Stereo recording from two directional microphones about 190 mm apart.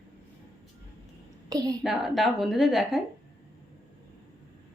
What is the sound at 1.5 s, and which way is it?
Speech, 20° right (ahead or behind).